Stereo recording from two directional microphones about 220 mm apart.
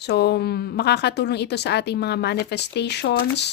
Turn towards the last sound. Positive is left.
turn(degrees=50)  # may be behind; listen again after turning